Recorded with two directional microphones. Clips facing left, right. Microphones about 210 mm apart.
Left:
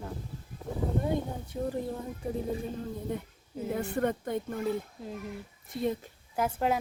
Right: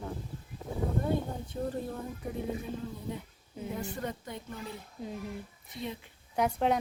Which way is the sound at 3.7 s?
60° left (ahead or behind).